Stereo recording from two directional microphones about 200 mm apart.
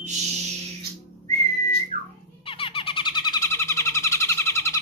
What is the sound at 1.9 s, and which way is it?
Music, 35° right (ahead or behind).